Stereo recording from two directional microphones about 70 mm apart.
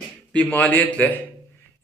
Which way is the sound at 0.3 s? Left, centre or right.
Left.